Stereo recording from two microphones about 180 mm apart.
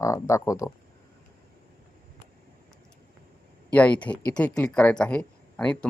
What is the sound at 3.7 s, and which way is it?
Speech, 10° left (ahead or behind).